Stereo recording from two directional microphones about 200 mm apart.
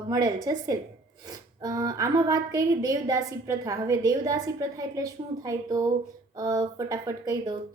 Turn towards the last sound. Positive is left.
turn(degrees=-20)  # may be behind; listen again after turning